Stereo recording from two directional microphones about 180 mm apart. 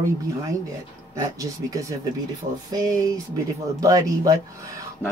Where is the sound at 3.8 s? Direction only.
20° right (ahead or behind).